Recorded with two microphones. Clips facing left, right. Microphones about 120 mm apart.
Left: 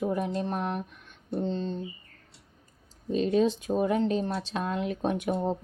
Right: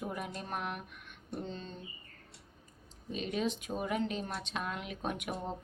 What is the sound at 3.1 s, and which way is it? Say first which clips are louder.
Speech: left 10 dB; 35° left (ahead or behind).